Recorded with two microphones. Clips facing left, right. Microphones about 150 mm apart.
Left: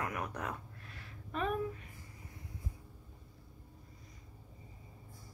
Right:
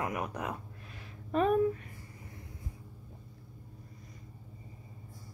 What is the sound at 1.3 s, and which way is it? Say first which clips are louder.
Speech: right 8 dB; 40° right (ahead or behind).